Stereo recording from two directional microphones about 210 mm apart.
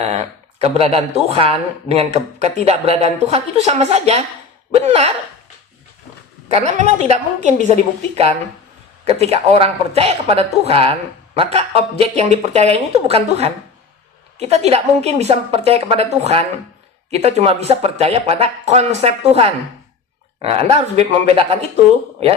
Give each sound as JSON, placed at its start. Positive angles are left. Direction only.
{"t": 0.6, "sound": "speech", "side_deg": -30}
{"t": 6.5, "sound": "a woman's voice", "side_deg": -30}
{"t": 9.0, "sound": "speech", "side_deg": -30}